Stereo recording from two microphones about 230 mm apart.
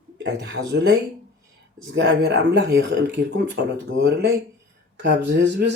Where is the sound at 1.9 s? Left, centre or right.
Right.